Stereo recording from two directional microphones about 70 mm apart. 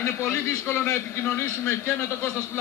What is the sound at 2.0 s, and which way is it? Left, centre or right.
Speech, left.